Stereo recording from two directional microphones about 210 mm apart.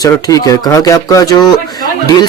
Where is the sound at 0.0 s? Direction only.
15° left (ahead or behind).